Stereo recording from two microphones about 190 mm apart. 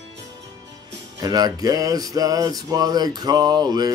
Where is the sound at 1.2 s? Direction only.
20° right (ahead or behind).